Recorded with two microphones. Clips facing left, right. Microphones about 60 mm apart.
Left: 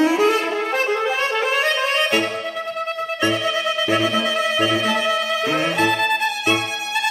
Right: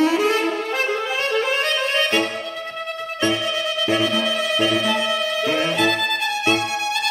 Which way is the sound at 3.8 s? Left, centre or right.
Left.